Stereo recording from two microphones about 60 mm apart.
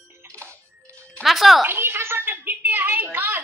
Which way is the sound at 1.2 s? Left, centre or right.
Centre.